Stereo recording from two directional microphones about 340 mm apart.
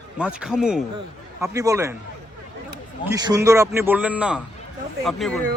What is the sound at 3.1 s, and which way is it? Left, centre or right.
Speech, centre.